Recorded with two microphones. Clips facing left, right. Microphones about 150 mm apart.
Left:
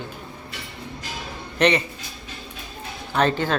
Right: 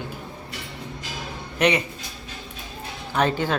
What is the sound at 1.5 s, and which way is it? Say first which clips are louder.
Speech: left 1 dB; 10° right (ahead or behind).